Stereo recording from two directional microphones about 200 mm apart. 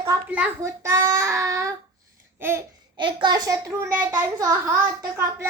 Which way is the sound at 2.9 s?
25° right (ahead or behind).